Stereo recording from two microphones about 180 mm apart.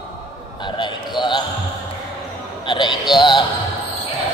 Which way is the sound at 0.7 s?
25° left (ahead or behind).